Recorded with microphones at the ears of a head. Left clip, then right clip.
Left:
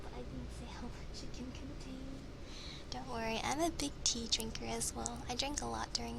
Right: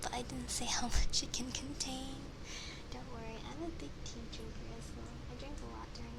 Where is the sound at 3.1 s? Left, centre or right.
Left.